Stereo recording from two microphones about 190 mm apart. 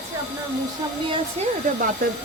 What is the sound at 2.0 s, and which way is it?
Speech, 50° right (ahead or behind).